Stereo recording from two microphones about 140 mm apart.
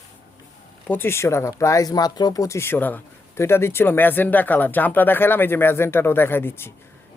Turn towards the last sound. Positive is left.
turn(degrees=15)  # may be behind; listen again after turning